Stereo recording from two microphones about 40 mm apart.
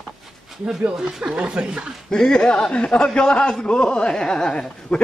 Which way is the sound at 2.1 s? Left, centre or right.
Centre.